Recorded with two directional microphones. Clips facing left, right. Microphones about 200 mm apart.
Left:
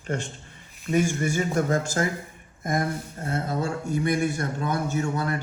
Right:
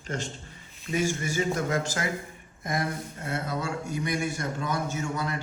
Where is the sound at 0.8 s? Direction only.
50° left (ahead or behind).